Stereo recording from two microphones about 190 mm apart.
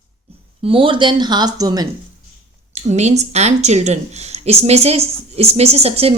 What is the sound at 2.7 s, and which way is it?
A woman's voice, 35° right (ahead or behind).